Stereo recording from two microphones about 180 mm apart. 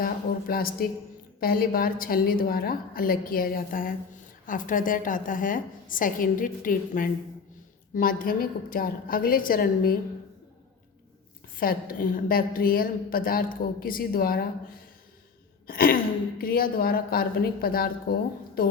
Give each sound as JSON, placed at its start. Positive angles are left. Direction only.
{"t": 0.0, "sound": "a sound", "side_deg": 55}
{"t": 1.4, "sound": "a woman's voice", "side_deg": 55}
{"t": 11.6, "sound": "a woman's voice", "side_deg": 55}
{"t": 15.6, "sound": "a woman's voice", "side_deg": 55}